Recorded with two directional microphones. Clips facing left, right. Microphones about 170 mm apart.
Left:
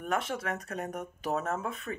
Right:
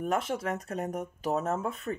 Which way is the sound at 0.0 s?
30° right (ahead or behind).